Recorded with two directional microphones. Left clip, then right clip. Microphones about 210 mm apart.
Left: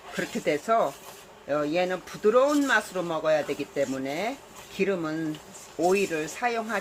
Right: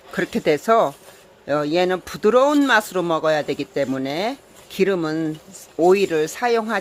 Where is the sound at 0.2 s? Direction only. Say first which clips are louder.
Right 8 dB; 55° right (ahead or behind).